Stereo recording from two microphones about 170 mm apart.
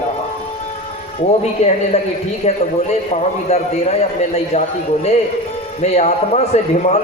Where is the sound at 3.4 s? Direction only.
40° left (ahead or behind).